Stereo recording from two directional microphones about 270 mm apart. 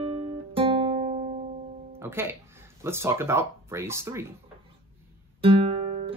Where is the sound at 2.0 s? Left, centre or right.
Centre.